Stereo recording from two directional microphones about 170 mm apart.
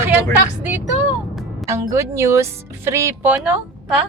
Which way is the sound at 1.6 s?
20° right (ahead or behind).